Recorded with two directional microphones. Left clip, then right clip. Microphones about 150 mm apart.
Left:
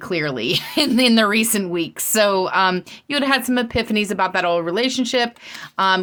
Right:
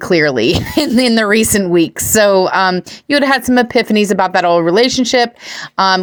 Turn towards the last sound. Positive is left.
turn(degrees=-40)  # may be behind; listen again after turning